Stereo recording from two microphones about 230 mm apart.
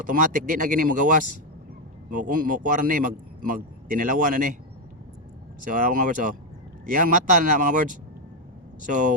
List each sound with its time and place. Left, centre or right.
0.0 s a man's voice: right
5.6 s a man's voice: right